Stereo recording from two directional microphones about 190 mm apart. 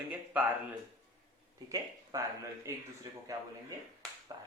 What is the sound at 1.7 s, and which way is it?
A man's voice, 15° right (ahead or behind).